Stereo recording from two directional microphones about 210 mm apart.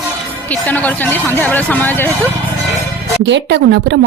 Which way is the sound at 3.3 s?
55° right (ahead or behind).